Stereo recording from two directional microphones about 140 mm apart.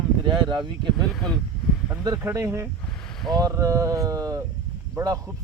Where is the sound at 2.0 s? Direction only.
20° right (ahead or behind).